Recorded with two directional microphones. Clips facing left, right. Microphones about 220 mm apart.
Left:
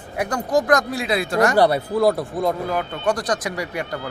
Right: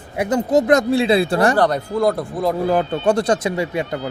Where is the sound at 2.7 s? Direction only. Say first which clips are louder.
Right 6 dB; 30° right (ahead or behind).